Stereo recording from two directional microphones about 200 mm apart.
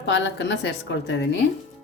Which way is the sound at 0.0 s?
60° left (ahead or behind).